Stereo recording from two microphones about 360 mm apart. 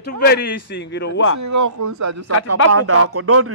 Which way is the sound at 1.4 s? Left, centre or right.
Right.